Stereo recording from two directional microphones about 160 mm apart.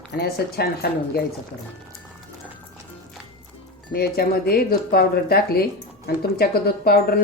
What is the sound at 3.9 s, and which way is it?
Speech, 75° left (ahead or behind).